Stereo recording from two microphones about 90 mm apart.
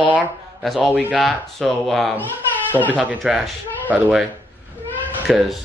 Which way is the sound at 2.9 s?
15° right (ahead or behind).